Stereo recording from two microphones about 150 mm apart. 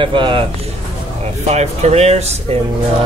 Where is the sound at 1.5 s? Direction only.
45° right (ahead or behind).